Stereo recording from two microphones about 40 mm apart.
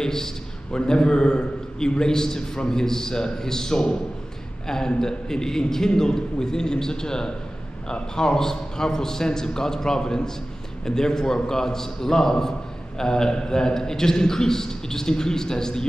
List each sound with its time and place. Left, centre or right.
0.0 s a man's voice: centre